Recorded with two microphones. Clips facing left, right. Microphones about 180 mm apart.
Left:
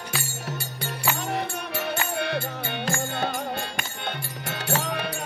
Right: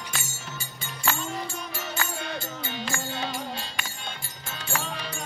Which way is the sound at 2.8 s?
50° left (ahead or behind).